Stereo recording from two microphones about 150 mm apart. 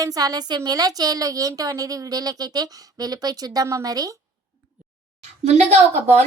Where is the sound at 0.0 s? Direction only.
25° right (ahead or behind).